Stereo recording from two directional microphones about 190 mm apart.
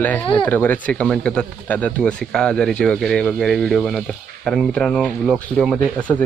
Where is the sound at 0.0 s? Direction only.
10° left (ahead or behind).